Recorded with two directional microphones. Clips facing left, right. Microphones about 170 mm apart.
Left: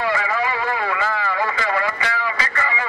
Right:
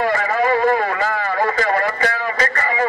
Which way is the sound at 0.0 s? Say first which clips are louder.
Right 4 dB; 45° right (ahead or behind).